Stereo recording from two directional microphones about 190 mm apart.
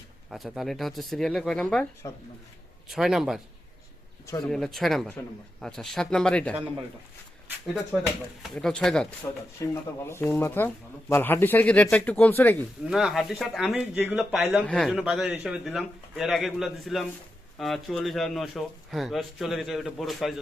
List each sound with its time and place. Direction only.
0.3 s speech: centre (ahead or behind)
4.4 s speech: centre (ahead or behind)
7.9 s speech: centre (ahead or behind)
9.6 s speech: 15° left (ahead or behind)
12.9 s speech: centre (ahead or behind)